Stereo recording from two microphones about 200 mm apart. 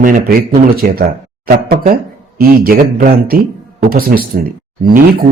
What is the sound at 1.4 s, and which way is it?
A man's voice, 45° right (ahead or behind).